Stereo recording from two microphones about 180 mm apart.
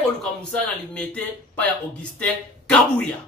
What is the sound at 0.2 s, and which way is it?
Speech, 5° left (ahead or behind).